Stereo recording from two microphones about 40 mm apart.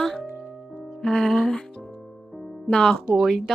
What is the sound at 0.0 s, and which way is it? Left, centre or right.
Music, centre.